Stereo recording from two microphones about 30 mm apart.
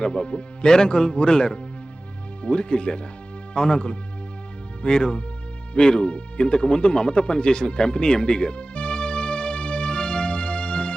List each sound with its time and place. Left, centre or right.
0.0 s speech: left
5.7 s music: left